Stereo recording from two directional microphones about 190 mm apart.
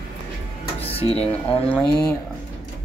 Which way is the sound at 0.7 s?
30° left (ahead or behind).